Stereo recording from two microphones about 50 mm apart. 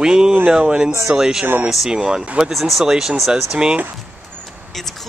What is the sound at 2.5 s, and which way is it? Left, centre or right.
Speech, centre.